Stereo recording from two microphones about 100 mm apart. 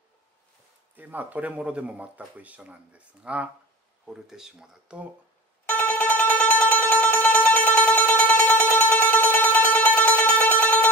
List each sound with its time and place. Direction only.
0.9 s speech: 15° right (ahead or behind)
5.7 s mandolin: 15° left (ahead or behind)